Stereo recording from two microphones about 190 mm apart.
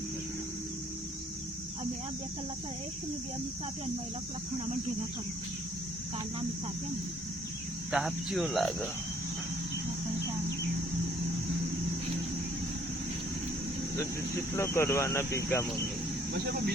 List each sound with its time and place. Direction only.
7.9 s cricket: 5° right (ahead or behind)
13.9 s speech: 15° left (ahead or behind)
16.3 s speech: 60° right (ahead or behind)